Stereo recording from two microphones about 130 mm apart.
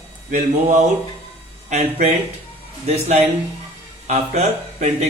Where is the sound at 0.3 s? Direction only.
65° right (ahead or behind).